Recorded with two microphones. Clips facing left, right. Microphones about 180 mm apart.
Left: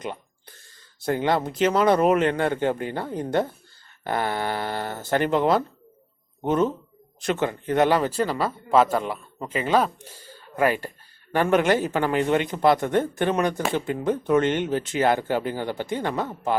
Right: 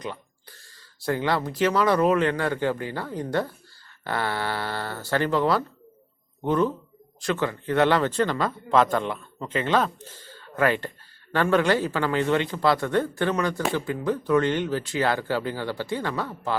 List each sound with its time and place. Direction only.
1.0 s speech: 20° left (ahead or behind)